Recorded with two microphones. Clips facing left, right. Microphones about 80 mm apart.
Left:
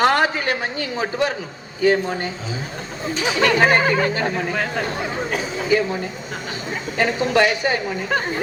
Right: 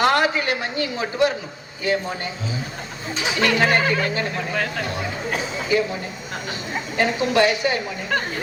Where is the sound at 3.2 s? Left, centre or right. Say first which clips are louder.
Left 3 dB; left.